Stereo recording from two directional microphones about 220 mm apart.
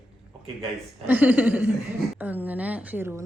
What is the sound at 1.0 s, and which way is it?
A woman's voice, 10° right (ahead or behind).